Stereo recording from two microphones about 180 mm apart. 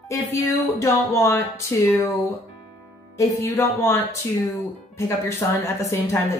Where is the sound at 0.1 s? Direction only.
15° left (ahead or behind).